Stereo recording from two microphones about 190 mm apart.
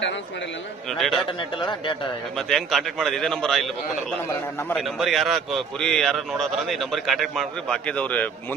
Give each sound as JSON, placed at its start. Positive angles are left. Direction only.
{"t": 0.9, "sound": "a man's voice", "side_deg": 0}
{"t": 1.6, "sound": "speech", "side_deg": 25}
{"t": 2.3, "sound": "a man's voice", "side_deg": 0}
{"t": 4.7, "sound": "a man's voice", "side_deg": 0}